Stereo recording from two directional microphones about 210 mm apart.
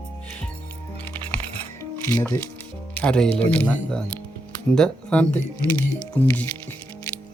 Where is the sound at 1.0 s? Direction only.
10° left (ahead or behind).